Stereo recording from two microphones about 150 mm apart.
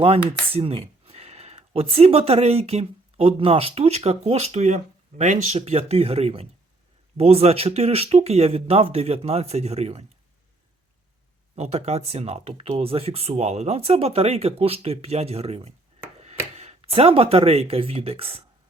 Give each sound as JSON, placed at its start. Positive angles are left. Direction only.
{"t": 0.0, "sound": "speech", "side_deg": -40}
{"t": 11.5, "sound": "speech", "side_deg": -45}